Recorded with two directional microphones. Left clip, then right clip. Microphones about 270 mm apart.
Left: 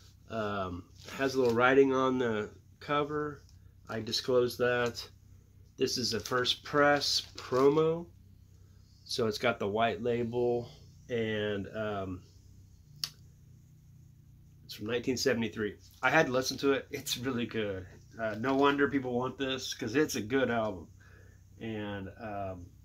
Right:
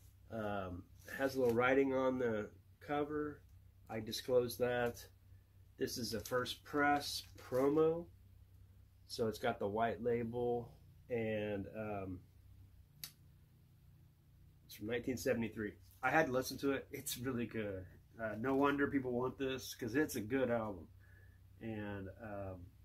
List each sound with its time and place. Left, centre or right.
0.3 s a sound: centre
1.1 s speech: centre
4.5 s speech: centre
5.8 s speech: centre
9.0 s speech: centre
14.7 s speech: centre